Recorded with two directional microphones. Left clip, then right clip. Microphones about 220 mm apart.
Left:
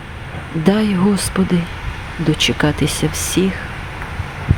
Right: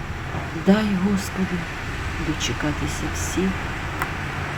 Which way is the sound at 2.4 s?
40° left (ahead or behind).